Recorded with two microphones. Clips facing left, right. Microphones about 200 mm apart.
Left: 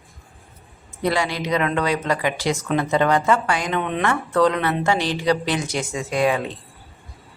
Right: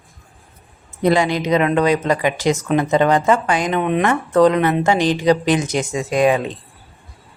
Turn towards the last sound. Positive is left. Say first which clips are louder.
# right 5 dB
turn(degrees=-20)  # may be behind; listen again after turning